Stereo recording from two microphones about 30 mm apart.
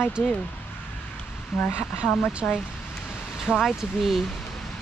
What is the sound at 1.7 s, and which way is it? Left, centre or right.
Speech, right.